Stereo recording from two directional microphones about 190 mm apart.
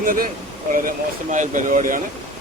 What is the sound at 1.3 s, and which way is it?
Speech, 40° right (ahead or behind).